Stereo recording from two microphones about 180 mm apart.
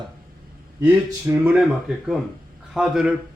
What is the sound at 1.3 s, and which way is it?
Speech, 10° right (ahead or behind).